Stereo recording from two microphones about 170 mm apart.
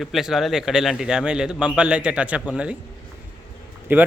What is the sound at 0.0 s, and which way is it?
A man's voice, centre (ahead or behind).